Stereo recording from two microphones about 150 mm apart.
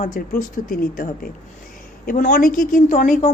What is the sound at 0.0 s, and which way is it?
A woman's voice, 60° left (ahead or behind).